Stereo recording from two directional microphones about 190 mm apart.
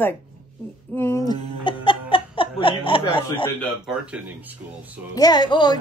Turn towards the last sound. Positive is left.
turn(degrees=25)  # may be behind; listen again after turning